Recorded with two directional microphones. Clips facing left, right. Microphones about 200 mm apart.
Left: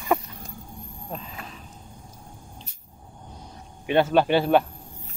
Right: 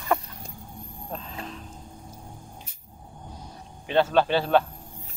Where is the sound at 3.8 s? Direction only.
15° left (ahead or behind).